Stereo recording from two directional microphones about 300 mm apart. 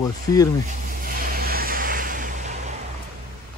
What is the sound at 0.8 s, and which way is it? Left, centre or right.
Vehicle, right.